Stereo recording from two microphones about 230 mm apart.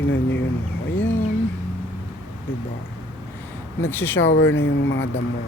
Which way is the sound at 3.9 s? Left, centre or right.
Centre.